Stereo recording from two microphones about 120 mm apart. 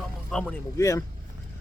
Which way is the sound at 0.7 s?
25° left (ahead or behind).